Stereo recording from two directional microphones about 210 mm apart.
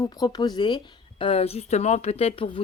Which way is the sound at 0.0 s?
20° left (ahead or behind).